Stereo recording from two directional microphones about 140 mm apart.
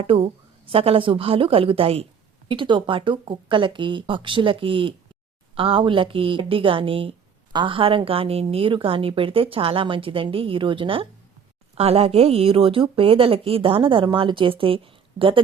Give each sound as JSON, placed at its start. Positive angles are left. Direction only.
{"t": 0.0, "sound": "a woman's voice", "side_deg": -40}